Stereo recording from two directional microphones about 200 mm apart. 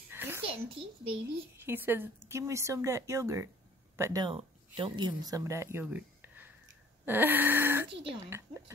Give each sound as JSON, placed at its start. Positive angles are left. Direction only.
{"t": 0.1, "sound": "a sound", "side_deg": -10}
{"t": 0.7, "sound": "a child's voice", "side_deg": -25}
{"t": 1.6, "sound": "speech", "side_deg": -10}